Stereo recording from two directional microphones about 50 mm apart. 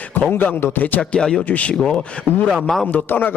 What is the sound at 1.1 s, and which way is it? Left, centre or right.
Speech, centre.